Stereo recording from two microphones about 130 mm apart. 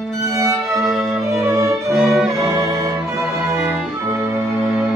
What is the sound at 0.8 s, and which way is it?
Music, centre (ahead or behind).